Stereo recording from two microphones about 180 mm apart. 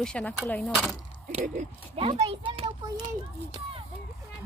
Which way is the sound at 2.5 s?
25° right (ahead or behind).